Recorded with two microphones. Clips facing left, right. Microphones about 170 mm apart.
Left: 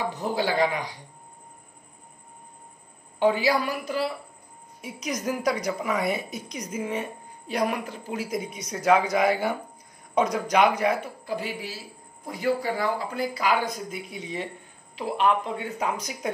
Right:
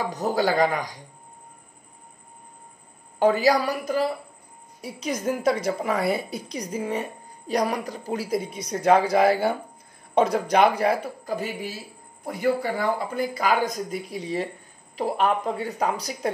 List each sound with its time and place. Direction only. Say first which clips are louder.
0.0 s speech: right 3 dB; 40° right (ahead or behind)
3.2 s a woman's voice: right 3 dB; 40° right (ahead or behind)
4.8 s a woman's voice: right 3 dB; 30° right (ahead or behind)